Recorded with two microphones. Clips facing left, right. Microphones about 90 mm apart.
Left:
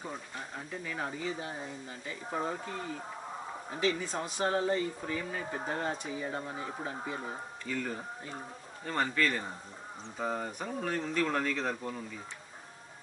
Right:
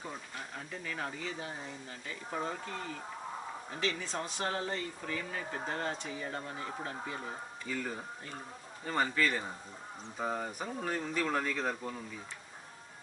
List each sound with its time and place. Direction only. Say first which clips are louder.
0.0 s speech: left 2 dB; 5° left (ahead or behind)
3.8 s speech: left 4 dB; 10° left (ahead or behind)
7.6 s speech: left 2 dB; 5° right (ahead or behind)